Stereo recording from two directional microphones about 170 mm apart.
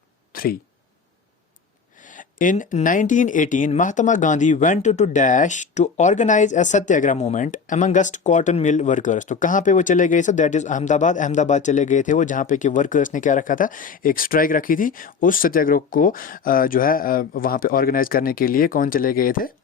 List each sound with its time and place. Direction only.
2.0 s speech: 50° left (ahead or behind)